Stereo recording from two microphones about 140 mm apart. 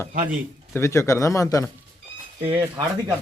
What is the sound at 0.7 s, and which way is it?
Speech, 20° left (ahead or behind).